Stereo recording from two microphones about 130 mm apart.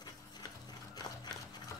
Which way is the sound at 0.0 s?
30° left (ahead or behind).